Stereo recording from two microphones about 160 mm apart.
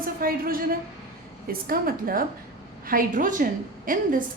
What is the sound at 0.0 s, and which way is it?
A woman's voice, 65° right (ahead or behind).